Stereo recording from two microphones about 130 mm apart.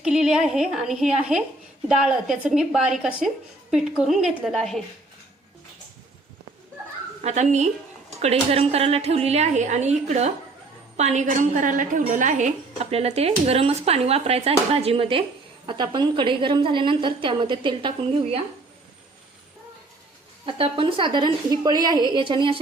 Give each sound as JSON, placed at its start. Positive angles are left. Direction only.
{"t": 0.0, "sound": "a woman's voice", "side_deg": -5}
{"t": 7.2, "sound": "a woman's voice", "side_deg": -60}
{"t": 15.6, "sound": "a woman's voice", "side_deg": -35}
{"t": 20.4, "sound": "a woman's voice", "side_deg": -45}